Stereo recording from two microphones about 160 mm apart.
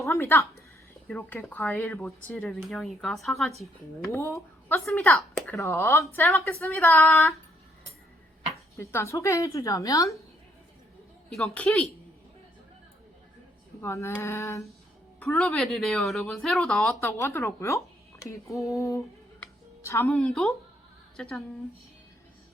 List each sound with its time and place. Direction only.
0.0 s speech: 15° left (ahead or behind); by 3.5 s centre (ahead or behind)
4.1 s speech: 20° left (ahead or behind)
4.9 s speech: 5° left (ahead or behind)
5.1 s speech: 20° left (ahead or behind)
8.7 s a woman's voice: 15° left (ahead or behind)
11.3 s speech: centre (ahead or behind)
13.8 s speech: 15° left (ahead or behind)
15.2 s speech: 5° left (ahead or behind)
17.1 s a woman's voice: 15° left (ahead or behind)
19.4 s music: 15° left (ahead or behind)
20.1 s speech: 5° left (ahead or behind)